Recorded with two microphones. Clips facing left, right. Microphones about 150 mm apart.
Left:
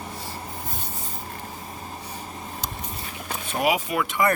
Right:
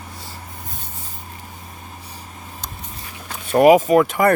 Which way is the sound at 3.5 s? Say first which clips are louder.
Right 13 dB; 50° right (ahead or behind).